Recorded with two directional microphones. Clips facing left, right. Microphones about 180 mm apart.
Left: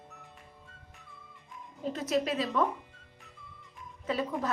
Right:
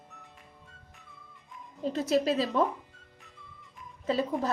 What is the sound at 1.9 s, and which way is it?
Speech, 30° right (ahead or behind).